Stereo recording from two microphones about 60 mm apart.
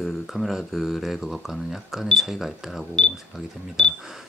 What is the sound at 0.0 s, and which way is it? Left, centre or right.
Speech, centre.